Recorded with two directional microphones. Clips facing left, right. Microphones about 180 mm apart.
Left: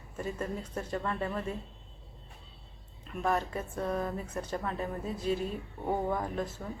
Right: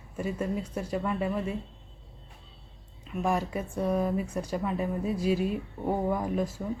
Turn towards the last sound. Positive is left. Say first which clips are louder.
# right 5 dB
turn(degrees=-10)  # may be behind; listen again after turning